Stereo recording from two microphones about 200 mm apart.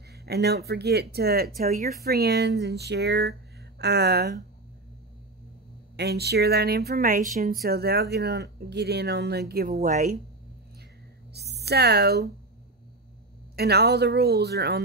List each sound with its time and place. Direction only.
0.1 s speech: 55° right (ahead or behind)
5.9 s speech: 55° right (ahead or behind)
11.3 s a woman's voice: 55° right (ahead or behind)
13.6 s speech: 55° right (ahead or behind)